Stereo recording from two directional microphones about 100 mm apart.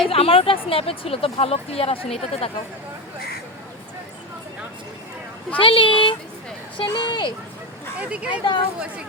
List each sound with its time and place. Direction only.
0.1 s speech: 70° left (ahead or behind)
5.5 s speech: 60° left (ahead or behind)
7.9 s speech: 10° right (ahead or behind)
8.3 s speech: 55° left (ahead or behind)